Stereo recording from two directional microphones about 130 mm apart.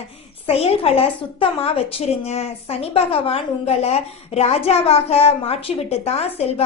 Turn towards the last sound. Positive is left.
turn(degrees=50)  # may be behind; listen again after turning